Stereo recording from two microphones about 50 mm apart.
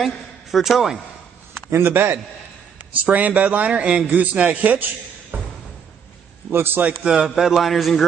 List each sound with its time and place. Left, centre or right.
0.0 s a man's voice: centre
1.7 s a man's voice: right
3.0 s a man's voice: right
5.3 s music: right
6.5 s a man's voice: right
6.8 s speech: right
7.1 s a man's voice: centre